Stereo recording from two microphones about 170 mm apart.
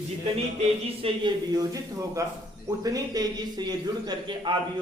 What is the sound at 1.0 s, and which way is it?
A man's voice, 25° right (ahead or behind).